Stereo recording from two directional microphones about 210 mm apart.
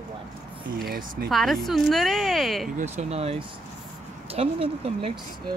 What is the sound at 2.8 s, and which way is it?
Speech, 30° right (ahead or behind).